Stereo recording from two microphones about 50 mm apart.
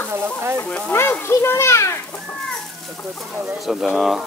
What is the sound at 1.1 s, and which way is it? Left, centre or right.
Speech, left.